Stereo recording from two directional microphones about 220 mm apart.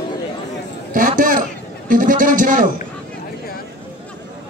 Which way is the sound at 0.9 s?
35° right (ahead or behind).